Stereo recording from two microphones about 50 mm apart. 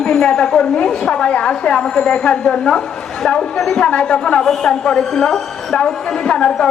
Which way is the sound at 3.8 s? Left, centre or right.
Left.